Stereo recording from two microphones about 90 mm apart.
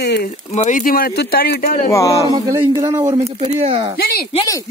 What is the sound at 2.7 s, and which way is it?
Speech, 45° right (ahead or behind).